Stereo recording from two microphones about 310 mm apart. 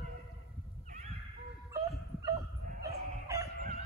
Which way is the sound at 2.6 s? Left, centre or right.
Right.